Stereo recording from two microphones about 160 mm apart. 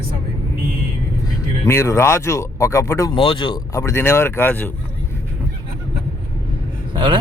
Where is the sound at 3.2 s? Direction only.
30° left (ahead or behind); by 4.7 s 15° left (ahead or behind).